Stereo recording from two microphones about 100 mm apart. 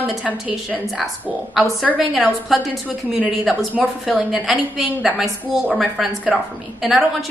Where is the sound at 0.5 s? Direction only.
10° right (ahead or behind).